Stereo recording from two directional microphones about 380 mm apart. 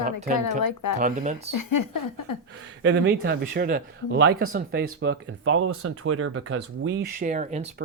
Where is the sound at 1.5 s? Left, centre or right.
Left.